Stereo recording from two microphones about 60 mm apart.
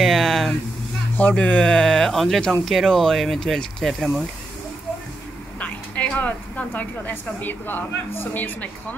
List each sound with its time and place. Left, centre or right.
0.0 s a sound: centre
1.3 s speech: centre
5.6 s speech: left
8.3 s a woman's voice: left